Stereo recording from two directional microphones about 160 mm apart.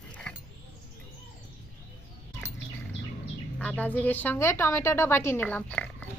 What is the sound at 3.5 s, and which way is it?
A woman's voice, 5° left (ahead or behind).